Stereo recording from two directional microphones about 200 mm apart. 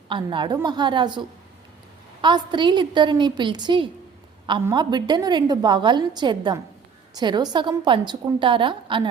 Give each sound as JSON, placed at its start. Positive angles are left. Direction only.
{"t": 0.1, "sound": "a woman's voice", "side_deg": -25}
{"t": 2.2, "sound": "a woman's voice", "side_deg": -25}